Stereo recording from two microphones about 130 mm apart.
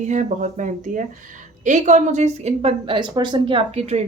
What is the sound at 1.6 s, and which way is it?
A woman's voice, 65° right (ahead or behind).